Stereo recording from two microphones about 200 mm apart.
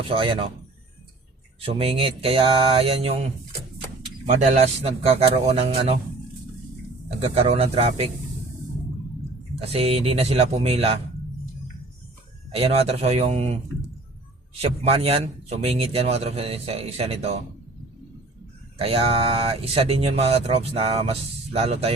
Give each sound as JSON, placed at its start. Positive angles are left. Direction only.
{"t": 0.1, "sound": "speech", "side_deg": -25}
{"t": 1.6, "sound": "speech", "side_deg": -25}
{"t": 4.3, "sound": "a man's voice", "side_deg": -35}
{"t": 7.5, "sound": "a man's voice", "side_deg": -30}
{"t": 9.6, "sound": "speech", "side_deg": -30}
{"t": 12.5, "sound": "a man's voice", "side_deg": -30}
{"t": 14.6, "sound": "speech", "side_deg": -30}
{"t": 18.8, "sound": "speech", "side_deg": -30}